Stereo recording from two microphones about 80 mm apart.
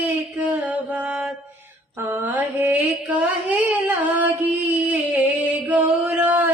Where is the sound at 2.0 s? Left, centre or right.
Right.